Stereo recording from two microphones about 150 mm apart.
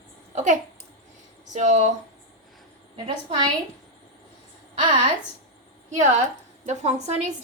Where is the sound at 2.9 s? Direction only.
35° right (ahead or behind).